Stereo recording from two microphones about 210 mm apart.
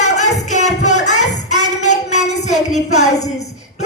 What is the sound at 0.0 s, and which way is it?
Music, 35° left (ahead or behind).